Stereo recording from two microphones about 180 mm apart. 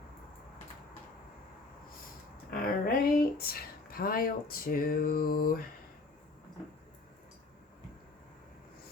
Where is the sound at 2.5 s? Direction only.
55° left (ahead or behind).